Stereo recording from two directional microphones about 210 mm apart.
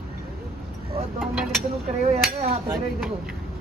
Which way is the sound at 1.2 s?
Centre (ahead or behind).